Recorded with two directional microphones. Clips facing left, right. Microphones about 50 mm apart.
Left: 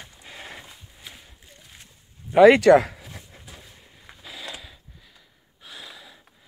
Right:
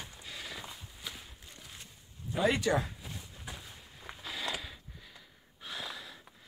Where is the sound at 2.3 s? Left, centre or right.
Left.